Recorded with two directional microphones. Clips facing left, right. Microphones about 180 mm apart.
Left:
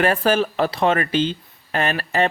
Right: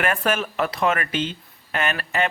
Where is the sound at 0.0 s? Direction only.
30° left (ahead or behind).